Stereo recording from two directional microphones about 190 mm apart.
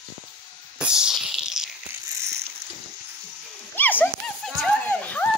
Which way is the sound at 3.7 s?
10° left (ahead or behind).